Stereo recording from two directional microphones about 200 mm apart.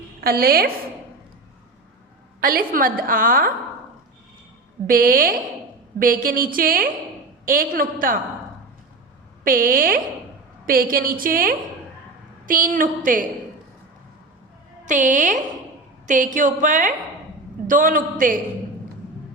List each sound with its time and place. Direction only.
0.2 s a woman's voice: 50° right (ahead or behind)
2.4 s a woman's voice: 45° right (ahead or behind)
4.9 s a woman's voice: 45° right (ahead or behind)
9.4 s a woman's voice: 45° right (ahead or behind)
14.8 s a woman's voice: 40° right (ahead or behind)